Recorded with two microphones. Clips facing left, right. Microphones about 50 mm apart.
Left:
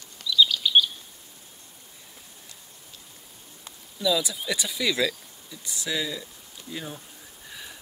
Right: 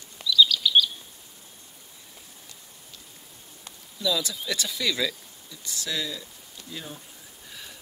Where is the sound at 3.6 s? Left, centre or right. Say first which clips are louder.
Left 2 dB; centre.